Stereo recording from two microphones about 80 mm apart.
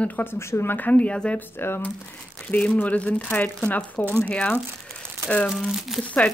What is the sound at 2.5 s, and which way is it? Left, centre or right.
Speech, centre.